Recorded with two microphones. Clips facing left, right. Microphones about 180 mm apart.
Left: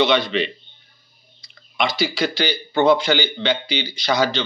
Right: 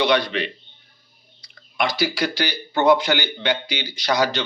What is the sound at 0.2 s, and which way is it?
Speech, 10° right (ahead or behind).